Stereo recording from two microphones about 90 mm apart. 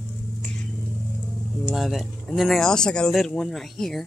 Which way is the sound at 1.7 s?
Centre (ahead or behind).